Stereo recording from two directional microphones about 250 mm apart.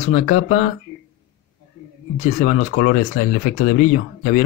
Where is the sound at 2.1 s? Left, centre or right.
Left.